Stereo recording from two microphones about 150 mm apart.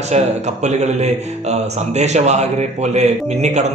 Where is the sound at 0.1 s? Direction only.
50° right (ahead or behind).